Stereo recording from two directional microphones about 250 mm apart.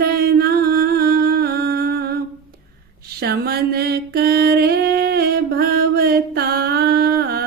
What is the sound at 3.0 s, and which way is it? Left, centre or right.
Mantra, right.